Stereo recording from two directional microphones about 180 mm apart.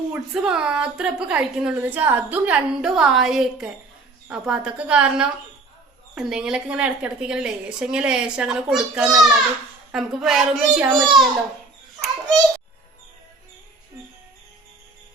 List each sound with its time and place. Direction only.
0.1 s a woman's voice: 5° right (ahead or behind)